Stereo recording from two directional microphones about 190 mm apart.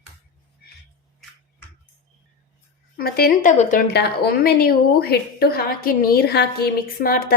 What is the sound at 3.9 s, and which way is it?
A woman's voice, 55° left (ahead or behind).